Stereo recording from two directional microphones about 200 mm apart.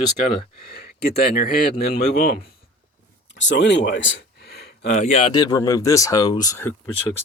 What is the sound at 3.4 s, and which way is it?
Speech, 60° left (ahead or behind).